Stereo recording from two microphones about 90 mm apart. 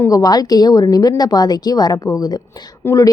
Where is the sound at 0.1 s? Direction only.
45° left (ahead or behind).